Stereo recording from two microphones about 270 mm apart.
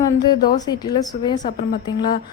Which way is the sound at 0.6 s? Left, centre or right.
Centre.